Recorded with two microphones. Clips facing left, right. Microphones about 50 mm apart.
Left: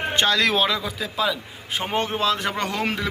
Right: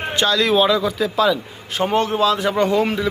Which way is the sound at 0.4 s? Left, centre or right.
Left.